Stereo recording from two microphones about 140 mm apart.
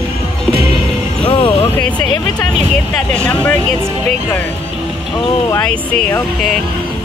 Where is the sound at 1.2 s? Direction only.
40° left (ahead or behind).